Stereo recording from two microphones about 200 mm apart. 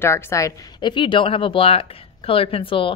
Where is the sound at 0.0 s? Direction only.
15° left (ahead or behind).